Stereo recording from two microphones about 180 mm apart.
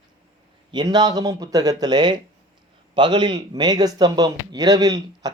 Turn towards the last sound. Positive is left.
turn(degrees=-20)  # may be behind; listen again after turning